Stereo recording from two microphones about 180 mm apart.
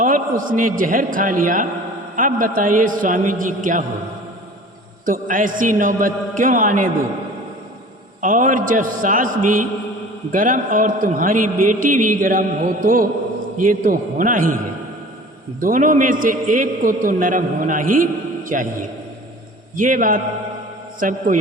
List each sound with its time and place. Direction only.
0.0 s a man's voice: 50° right (ahead or behind)
5.0 s a man's voice: 50° right (ahead or behind)
8.2 s a man's voice: 45° right (ahead or behind)
15.6 s a man's voice: 45° right (ahead or behind)